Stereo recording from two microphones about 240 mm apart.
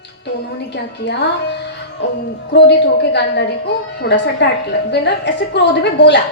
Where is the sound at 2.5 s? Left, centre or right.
Left.